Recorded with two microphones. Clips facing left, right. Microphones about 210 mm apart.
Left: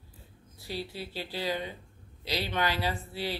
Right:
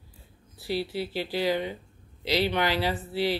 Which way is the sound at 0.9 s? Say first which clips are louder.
Right 8 dB; 90° right.